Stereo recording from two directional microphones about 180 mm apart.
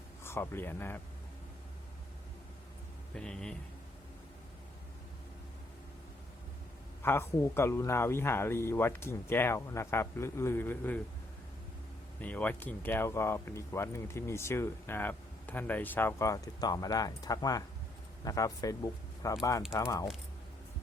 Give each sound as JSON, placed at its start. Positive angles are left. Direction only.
{"t": 0.2, "sound": "speech", "side_deg": 15}
{"t": 3.2, "sound": "speech", "side_deg": 5}
{"t": 7.0, "sound": "speech", "side_deg": 10}
{"t": 12.2, "sound": "speech", "side_deg": 10}